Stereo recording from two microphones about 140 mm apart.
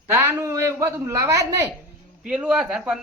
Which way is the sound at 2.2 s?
5° right (ahead or behind).